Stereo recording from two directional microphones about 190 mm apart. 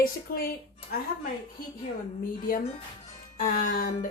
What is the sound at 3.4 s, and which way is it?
Speech, 45° left (ahead or behind).